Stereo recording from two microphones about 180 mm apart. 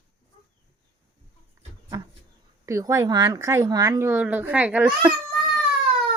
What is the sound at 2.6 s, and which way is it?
Speech, 20° right (ahead or behind).